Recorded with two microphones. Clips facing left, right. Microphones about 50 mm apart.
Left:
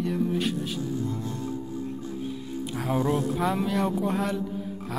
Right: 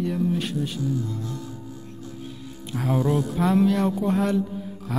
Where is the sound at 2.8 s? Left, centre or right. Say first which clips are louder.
Right 3 dB; centre.